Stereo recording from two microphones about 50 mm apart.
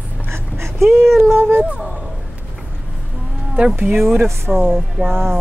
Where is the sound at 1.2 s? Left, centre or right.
Right.